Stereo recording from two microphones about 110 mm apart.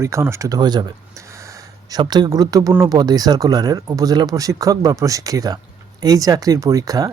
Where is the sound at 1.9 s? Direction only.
40° right (ahead or behind).